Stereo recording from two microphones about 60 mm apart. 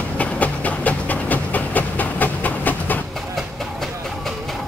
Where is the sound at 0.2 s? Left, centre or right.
Left.